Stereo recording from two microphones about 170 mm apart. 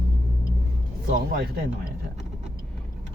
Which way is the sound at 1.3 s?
55° right (ahead or behind).